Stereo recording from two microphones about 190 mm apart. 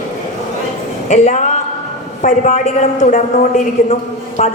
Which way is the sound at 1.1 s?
40° left (ahead or behind).